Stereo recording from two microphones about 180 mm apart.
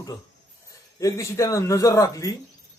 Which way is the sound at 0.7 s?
20° left (ahead or behind).